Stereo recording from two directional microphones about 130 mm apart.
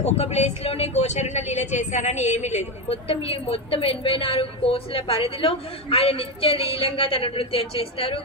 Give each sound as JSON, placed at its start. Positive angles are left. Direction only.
{"t": 0.0, "sound": "speech", "side_deg": 55}